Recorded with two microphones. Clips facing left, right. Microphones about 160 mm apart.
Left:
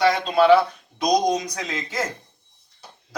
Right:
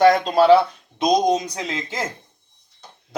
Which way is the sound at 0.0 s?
45° right (ahead or behind).